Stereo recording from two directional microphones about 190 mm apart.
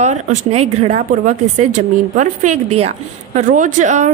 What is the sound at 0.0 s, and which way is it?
Speech, 40° right (ahead or behind).